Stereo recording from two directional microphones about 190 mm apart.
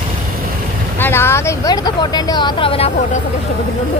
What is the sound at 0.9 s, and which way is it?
Speech, 10° left (ahead or behind).